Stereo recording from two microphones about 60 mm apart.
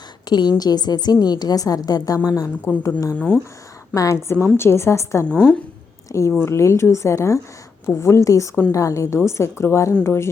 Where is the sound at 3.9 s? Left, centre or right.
Left.